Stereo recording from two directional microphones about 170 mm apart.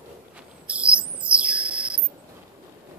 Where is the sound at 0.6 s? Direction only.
5° right (ahead or behind).